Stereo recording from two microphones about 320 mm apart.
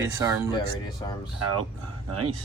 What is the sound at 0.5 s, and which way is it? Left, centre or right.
Speech, centre.